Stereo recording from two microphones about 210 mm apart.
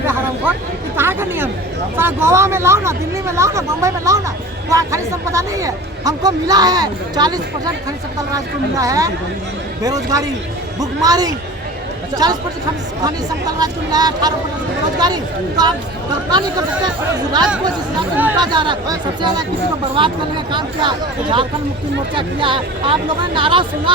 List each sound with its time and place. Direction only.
0.5 s a sound: 10° right (ahead or behind)
0.9 s chatter: 10° right (ahead or behind)
2.0 s a man's voice: 10° right (ahead or behind)
13.6 s speech: 20° right (ahead or behind)
18.3 s speech: 20° right (ahead or behind)